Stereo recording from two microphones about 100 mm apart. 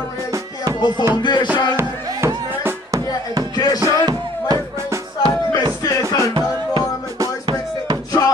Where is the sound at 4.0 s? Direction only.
40° right (ahead or behind).